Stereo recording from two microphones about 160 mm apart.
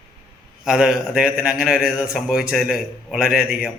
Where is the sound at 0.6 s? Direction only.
5° right (ahead or behind).